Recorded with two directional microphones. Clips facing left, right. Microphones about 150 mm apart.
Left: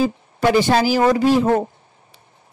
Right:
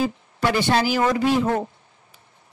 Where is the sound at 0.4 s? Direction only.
40° left (ahead or behind).